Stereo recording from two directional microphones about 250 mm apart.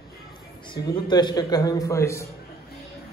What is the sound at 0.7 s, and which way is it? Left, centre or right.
A man's voice, centre.